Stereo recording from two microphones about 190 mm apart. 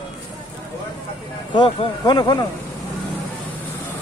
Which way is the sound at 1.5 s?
25° left (ahead or behind).